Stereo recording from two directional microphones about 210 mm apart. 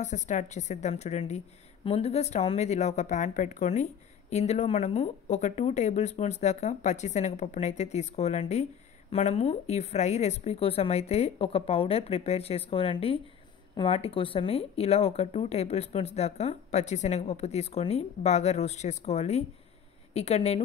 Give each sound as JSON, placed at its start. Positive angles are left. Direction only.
{"t": 0.0, "sound": "a woman's voice", "side_deg": 35}